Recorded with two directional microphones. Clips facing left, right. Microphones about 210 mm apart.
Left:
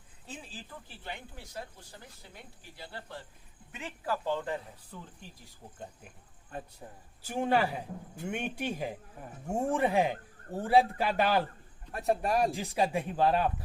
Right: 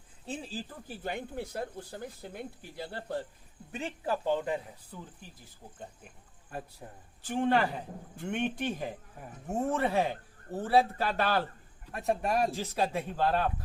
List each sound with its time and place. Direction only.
0.3 s speech: 35° right (ahead or behind)
3.7 s speech: 30° right (ahead or behind); by 4.9 s 15° right (ahead or behind)
7.2 s speech: 10° left (ahead or behind)
11.9 s speech: centre (ahead or behind)
12.5 s speech: 15° left (ahead or behind)